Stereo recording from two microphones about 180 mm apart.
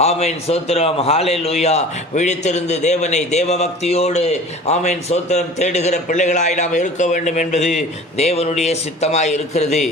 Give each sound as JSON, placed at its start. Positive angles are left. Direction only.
{"t": 0.0, "sound": "a man's voice", "side_deg": 35}